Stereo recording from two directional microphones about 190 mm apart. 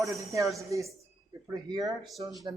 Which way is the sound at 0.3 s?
15° right (ahead or behind).